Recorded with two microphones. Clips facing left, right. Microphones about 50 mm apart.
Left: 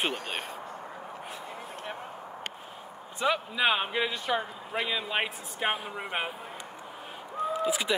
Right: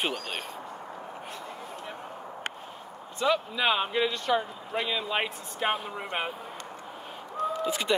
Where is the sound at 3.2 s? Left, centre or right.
Centre.